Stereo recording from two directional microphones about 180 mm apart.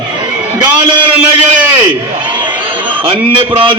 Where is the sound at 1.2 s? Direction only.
5° right (ahead or behind).